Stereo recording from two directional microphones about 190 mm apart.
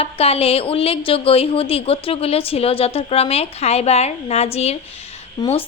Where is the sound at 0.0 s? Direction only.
30° left (ahead or behind).